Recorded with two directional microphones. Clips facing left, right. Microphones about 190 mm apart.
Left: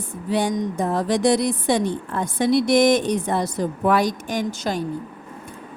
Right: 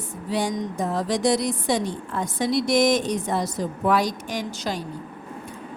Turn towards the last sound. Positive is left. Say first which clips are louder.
# left 4 dB
turn(degrees=50)  # may be behind; listen again after turning